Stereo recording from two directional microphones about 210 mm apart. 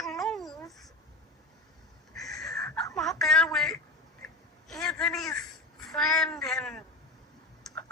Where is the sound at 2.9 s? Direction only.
Centre (ahead or behind).